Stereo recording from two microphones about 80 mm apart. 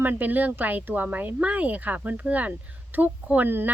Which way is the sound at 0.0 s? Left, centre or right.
Right.